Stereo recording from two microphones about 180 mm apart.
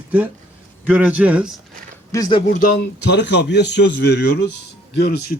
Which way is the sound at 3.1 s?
75° left (ahead or behind).